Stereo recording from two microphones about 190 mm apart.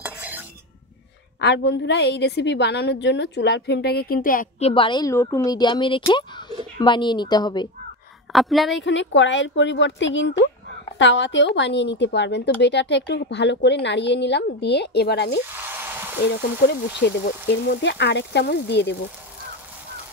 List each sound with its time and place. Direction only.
0.0 s cutlery: 10° right (ahead or behind)
1.4 s a woman's voice: 65° left (ahead or behind); by 4.5 s 45° left (ahead or behind)
4.6 s a woman's voice: 30° left (ahead or behind)
8.3 s a woman's voice: centre (ahead or behind)
8.7 s a woman's voice: 75° left (ahead or behind)
15.5 s a sound: 10° right (ahead or behind)
16.3 s a woman's voice: 60° left (ahead or behind)